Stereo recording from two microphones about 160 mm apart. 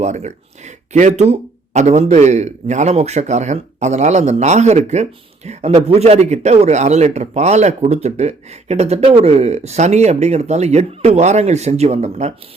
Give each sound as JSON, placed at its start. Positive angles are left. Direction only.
{"t": 0.0, "sound": "a man's voice", "side_deg": -45}